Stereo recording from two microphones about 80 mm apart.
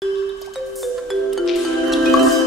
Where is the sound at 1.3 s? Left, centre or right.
Centre.